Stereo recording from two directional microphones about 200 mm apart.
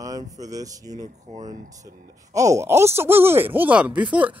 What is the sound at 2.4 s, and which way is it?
Speech, 15° right (ahead or behind).